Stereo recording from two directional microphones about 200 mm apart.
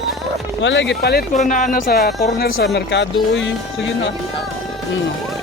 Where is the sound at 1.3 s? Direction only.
40° left (ahead or behind); by 3.5 s 65° left (ahead or behind).